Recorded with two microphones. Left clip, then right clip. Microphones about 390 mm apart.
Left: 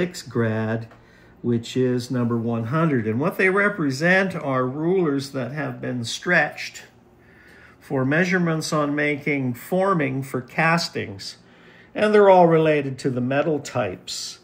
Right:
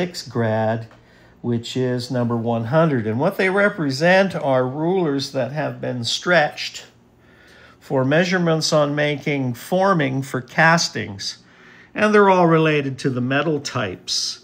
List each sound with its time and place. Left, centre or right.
0.0 s speech: centre
7.9 s speech: right